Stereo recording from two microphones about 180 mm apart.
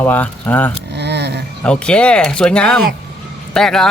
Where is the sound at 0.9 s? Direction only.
65° right (ahead or behind).